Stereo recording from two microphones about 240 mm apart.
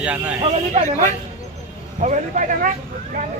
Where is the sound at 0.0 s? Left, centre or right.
Centre.